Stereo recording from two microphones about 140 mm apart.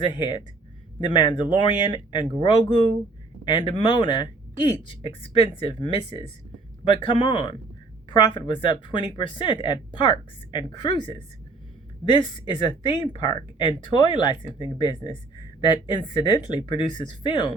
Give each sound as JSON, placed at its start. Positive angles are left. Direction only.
{"t": 0.0, "sound": "speech", "side_deg": 35}